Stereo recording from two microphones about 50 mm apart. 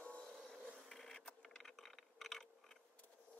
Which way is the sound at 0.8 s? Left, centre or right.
Centre.